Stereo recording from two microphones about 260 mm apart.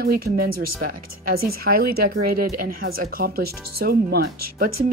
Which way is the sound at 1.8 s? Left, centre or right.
Right.